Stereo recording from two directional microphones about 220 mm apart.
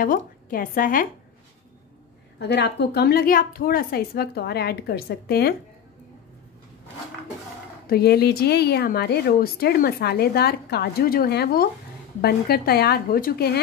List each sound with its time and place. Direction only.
0.0 s a woman's voice: 40° left (ahead or behind)
2.3 s a woman's voice: 50° left (ahead or behind)
7.8 s a woman's voice: 45° left (ahead or behind)